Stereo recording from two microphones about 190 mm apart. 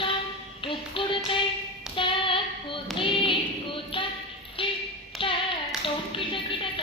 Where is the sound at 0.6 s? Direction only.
25° left (ahead or behind).